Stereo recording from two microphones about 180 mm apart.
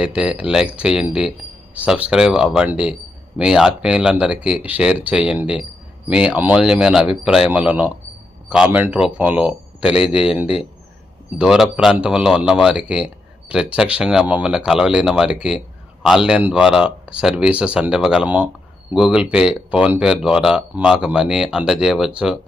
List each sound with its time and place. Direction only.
0.0 s speech: 5° right (ahead or behind)
10.4 s speech: 35° left (ahead or behind)
11.3 s speech: centre (ahead or behind)